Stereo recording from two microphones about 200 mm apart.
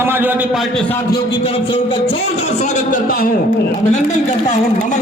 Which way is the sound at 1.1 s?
25° left (ahead or behind).